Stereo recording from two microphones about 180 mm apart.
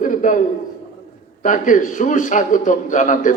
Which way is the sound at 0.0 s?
45° left (ahead or behind).